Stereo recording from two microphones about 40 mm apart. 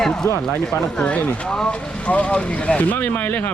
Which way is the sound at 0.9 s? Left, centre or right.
Left.